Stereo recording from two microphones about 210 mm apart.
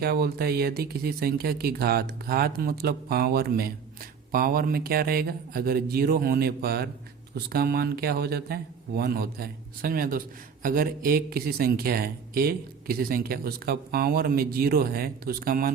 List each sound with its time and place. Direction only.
0.0 s speech: 45° right (ahead or behind)